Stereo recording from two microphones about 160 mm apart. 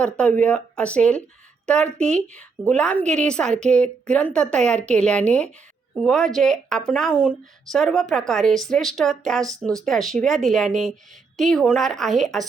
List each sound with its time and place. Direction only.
0.0 s a woman's voice: 10° left (ahead or behind)